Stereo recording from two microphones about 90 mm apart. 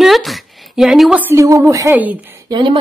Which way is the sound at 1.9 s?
20° right (ahead or behind).